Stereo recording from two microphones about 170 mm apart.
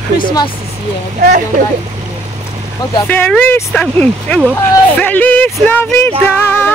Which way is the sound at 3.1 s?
10° left (ahead or behind).